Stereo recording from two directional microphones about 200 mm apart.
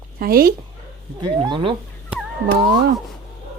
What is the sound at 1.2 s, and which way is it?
Speech, 25° right (ahead or behind).